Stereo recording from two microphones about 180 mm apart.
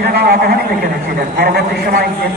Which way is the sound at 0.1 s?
60° right (ahead or behind).